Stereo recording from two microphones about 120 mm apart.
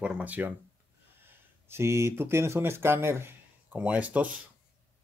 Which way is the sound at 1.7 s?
25° right (ahead or behind).